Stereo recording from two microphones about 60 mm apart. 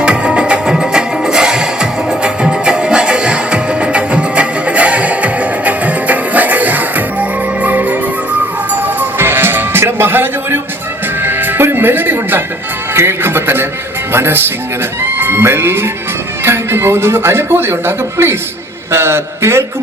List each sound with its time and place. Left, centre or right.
0.0 s music: centre; by 9.8 s right
10.0 s a sound: right
11.2 s music: right
12.9 s a man's voice: right